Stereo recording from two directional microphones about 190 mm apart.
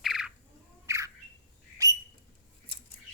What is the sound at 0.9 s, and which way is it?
Squawk, 15° right (ahead or behind).